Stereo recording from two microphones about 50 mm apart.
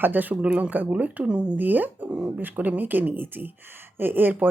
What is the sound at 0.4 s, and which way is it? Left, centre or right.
A woman's voice, right.